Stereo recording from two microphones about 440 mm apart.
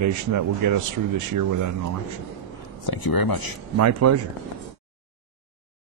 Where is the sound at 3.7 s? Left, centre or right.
Right.